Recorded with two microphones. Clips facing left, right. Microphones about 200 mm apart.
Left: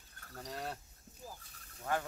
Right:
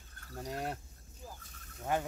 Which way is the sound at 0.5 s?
15° right (ahead or behind).